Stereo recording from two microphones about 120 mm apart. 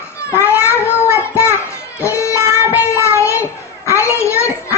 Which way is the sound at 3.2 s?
25° left (ahead or behind).